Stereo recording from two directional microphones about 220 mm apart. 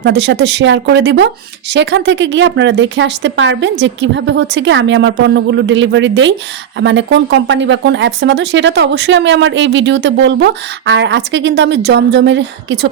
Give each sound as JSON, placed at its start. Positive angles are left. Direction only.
{"t": 0.0, "sound": "speech", "side_deg": -50}